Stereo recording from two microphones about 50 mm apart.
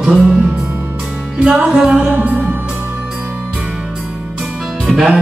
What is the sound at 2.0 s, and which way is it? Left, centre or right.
Music, right.